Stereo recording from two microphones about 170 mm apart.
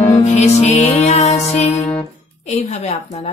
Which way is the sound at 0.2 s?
40° left (ahead or behind).